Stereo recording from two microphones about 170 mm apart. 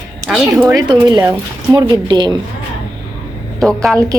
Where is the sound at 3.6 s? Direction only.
5° left (ahead or behind).